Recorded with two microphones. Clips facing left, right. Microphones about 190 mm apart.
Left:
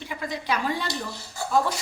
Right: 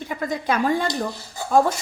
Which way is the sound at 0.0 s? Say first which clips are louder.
Right 6 dB; 45° right (ahead or behind).